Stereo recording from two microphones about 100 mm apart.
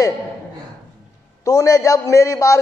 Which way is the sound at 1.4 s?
35° left (ahead or behind).